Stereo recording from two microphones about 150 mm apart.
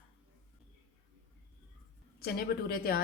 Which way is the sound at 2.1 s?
90° left.